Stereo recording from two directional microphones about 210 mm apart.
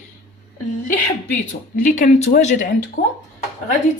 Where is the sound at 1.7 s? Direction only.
35° left (ahead or behind).